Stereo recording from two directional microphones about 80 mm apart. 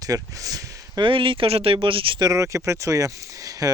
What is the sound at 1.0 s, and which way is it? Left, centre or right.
Speech, right.